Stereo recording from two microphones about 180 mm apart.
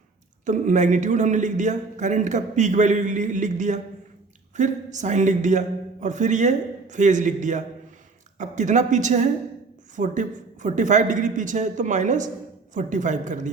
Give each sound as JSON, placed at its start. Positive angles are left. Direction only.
{"t": 0.4, "sound": "a man's voice", "side_deg": -45}